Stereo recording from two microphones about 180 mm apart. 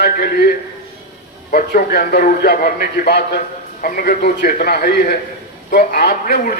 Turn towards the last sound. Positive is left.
turn(degrees=55)  # may be behind; listen again after turning